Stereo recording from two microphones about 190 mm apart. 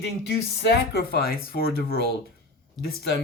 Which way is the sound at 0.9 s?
55° left (ahead or behind).